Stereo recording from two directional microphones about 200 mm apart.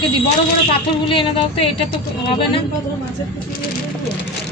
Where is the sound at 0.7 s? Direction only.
25° left (ahead or behind).